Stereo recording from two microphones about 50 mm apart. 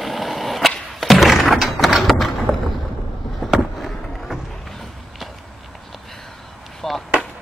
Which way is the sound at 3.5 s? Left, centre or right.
Centre.